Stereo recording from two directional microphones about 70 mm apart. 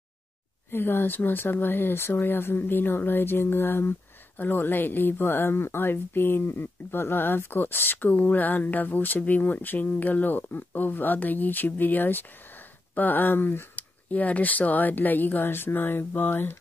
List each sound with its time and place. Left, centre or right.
0.7 s speech: left